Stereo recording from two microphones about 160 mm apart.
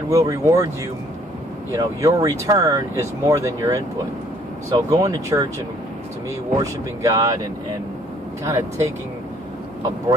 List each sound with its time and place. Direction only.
0.1 s speech: 20° right (ahead or behind)
1.8 s speech: 25° right (ahead or behind)
6.6 s speech: 20° right (ahead or behind)
8.5 s speech: 15° right (ahead or behind)